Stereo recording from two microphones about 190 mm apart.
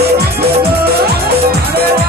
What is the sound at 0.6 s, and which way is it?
Music, 55° right (ahead or behind).